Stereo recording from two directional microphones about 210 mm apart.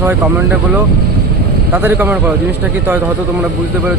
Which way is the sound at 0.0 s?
10° right (ahead or behind).